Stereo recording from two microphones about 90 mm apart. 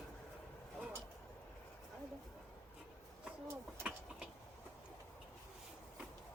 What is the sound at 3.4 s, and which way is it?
Speech, 30° right (ahead or behind).